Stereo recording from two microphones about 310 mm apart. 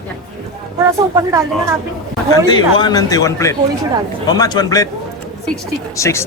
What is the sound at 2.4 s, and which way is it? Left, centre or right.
A man's voice, centre.